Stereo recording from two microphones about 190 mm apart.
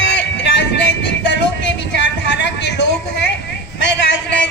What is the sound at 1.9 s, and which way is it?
Speech, 65° left (ahead or behind).